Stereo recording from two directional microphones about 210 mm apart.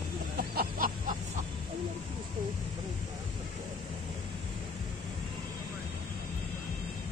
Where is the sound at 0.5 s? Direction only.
40° right (ahead or behind).